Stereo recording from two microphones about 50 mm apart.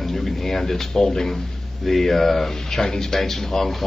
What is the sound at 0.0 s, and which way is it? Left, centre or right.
A man's voice, centre.